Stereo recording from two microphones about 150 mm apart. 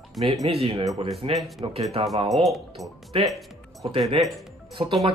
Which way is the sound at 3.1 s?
35° right (ahead or behind).